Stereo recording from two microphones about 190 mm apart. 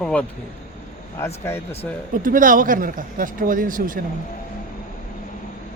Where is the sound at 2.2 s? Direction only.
45° right (ahead or behind).